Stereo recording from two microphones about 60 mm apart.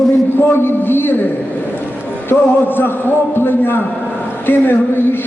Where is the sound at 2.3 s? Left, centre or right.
Left.